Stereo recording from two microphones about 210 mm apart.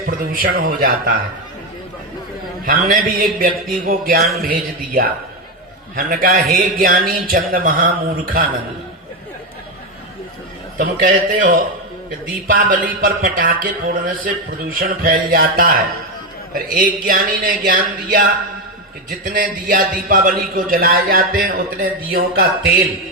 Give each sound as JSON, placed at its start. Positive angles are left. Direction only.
{"t": 0.0, "sound": "a man's voice", "side_deg": -45}
{"t": 2.6, "sound": "a man's voice", "side_deg": -45}
{"t": 10.8, "sound": "a man's voice", "side_deg": -40}